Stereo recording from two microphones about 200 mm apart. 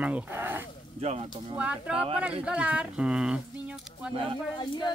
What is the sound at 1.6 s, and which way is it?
Speech, 5° right (ahead or behind).